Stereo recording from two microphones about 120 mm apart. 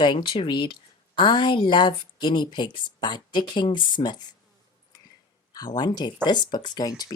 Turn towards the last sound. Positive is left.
turn(degrees=35)  # may be behind; listen again after turning